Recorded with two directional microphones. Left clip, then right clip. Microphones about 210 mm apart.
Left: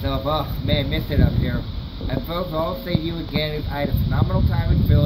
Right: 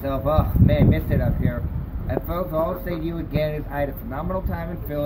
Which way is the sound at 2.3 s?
Centre (ahead or behind).